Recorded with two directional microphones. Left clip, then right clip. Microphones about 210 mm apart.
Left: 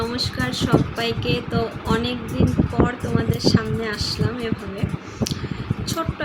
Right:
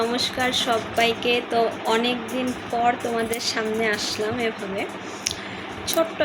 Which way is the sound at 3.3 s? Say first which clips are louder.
Left 2 dB; 15° left (ahead or behind).